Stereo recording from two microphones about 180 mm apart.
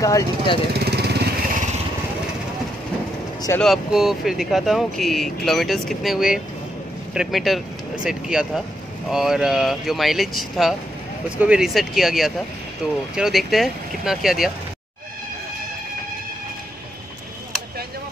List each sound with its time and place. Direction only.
0.0 s speech: 20° left (ahead or behind)
0.7 s lawn mower: 65° right (ahead or behind)
3.5 s speech: centre (ahead or behind)